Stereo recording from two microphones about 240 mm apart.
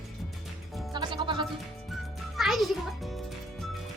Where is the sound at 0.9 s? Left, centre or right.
Centre.